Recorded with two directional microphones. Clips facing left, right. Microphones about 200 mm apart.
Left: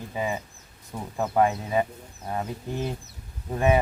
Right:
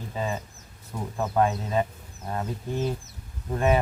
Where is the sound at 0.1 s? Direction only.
15° left (ahead or behind).